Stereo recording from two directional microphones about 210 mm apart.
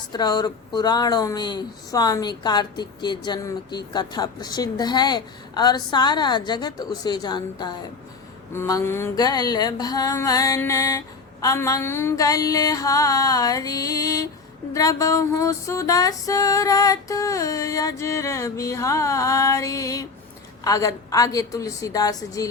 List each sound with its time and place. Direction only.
0.1 s speech: 20° left (ahead or behind)
8.5 s music: 15° left (ahead or behind)